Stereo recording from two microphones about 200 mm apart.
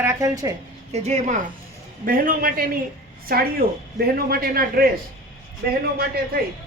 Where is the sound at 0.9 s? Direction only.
35° right (ahead or behind); by 6.4 s 50° right (ahead or behind).